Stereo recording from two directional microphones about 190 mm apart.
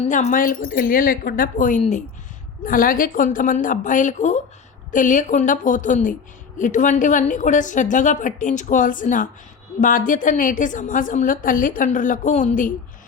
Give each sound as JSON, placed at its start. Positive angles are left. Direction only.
{"t": 0.0, "sound": "a woman's voice", "side_deg": 40}